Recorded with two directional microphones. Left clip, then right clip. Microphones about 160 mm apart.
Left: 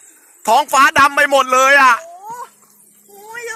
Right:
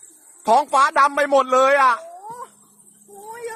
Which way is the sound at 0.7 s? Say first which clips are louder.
Left 5 dB; centre (ahead or behind).